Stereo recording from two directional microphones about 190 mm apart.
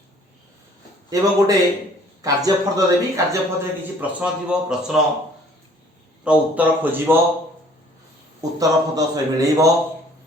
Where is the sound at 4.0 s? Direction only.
5° right (ahead or behind).